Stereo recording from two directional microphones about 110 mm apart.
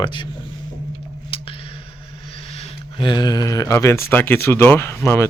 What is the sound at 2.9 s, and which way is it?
Speech, 45° left (ahead or behind).